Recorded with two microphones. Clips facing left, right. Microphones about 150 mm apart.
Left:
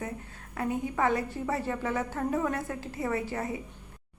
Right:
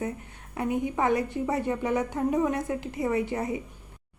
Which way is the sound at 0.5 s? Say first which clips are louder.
Right 3 dB; 20° right (ahead or behind).